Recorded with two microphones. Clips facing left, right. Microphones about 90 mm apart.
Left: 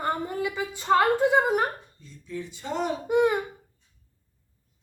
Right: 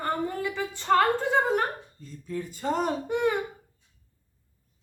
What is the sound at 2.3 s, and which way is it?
Speech, 45° right (ahead or behind).